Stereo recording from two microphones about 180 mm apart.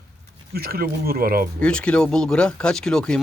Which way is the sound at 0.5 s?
60° right (ahead or behind).